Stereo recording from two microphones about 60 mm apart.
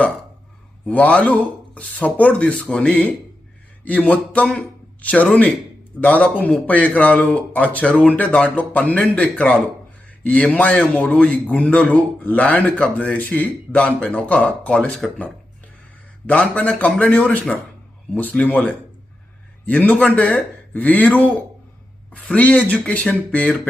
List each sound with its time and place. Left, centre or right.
0.9 s a man's voice: left
16.2 s a man's voice: left